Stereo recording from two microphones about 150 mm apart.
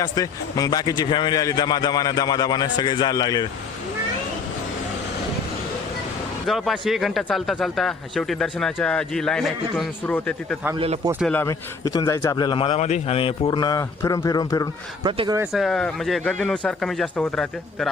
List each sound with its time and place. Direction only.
0.0 s a man's voice: 25° left (ahead or behind)
6.5 s speech: centre (ahead or behind)
10.8 s speech: 45° right (ahead or behind)
11.3 s speech: 15° left (ahead or behind)
11.9 s a man's voice: 25° left (ahead or behind)
15.0 s speech: 30° right (ahead or behind)
15.5 s speech: centre (ahead or behind)